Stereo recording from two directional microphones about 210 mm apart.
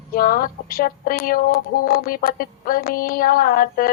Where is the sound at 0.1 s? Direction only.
45° left (ahead or behind).